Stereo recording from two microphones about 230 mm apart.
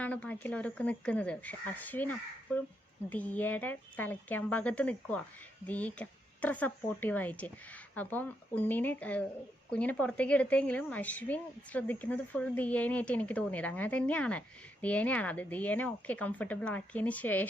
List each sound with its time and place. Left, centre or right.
0.0 s speech: centre